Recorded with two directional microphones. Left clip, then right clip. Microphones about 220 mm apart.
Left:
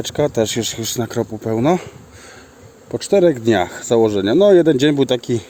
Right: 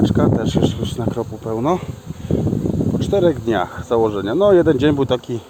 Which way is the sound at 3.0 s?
45° left (ahead or behind).